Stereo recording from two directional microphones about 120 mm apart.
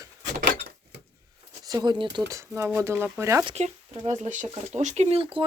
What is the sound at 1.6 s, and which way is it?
Speech, 35° right (ahead or behind).